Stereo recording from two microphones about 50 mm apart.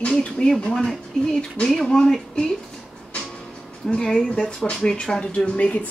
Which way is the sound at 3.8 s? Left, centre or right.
Centre.